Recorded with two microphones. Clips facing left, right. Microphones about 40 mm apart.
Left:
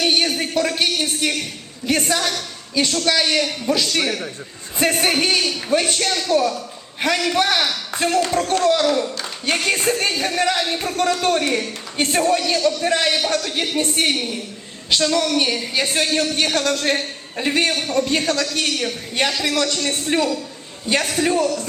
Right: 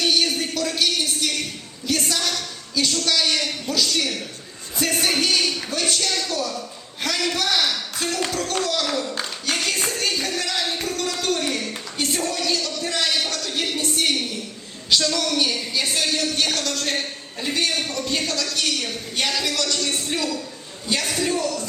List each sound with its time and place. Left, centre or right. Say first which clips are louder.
0.0 s speech: left 2 dB; left
5.4 s a man's voice: left 1 dB; centre
5.7 s a man's voice: left 7 dB; left
14.8 s speech: left 3 dB; centre
15.7 s a man's voice: left 4 dB; left